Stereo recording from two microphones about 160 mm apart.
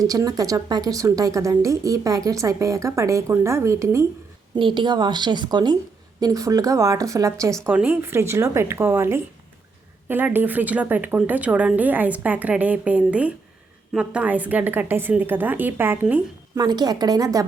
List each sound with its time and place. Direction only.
0.0 s a woman's voice: 20° right (ahead or behind)
4.5 s a woman's voice: 30° right (ahead or behind); by 16.2 s 10° right (ahead or behind)
16.6 s a woman's voice: 25° right (ahead or behind)